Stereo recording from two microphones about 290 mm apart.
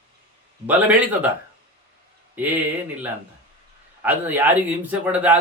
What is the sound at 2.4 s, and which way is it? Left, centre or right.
Speech, centre.